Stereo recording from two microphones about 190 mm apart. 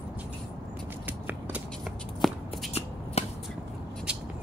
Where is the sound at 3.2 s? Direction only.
35° left (ahead or behind).